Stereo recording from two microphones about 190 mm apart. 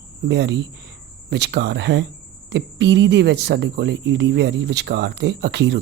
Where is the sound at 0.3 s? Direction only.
65° right (ahead or behind).